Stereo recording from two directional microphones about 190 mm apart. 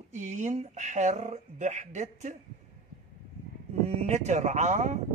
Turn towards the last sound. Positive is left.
turn(degrees=-40)  # may be behind; listen again after turning